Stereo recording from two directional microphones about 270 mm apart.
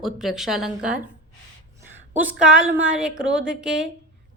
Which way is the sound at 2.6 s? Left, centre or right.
Right.